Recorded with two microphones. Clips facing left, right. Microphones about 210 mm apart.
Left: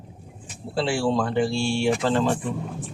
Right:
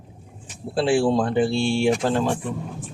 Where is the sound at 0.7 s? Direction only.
20° right (ahead or behind).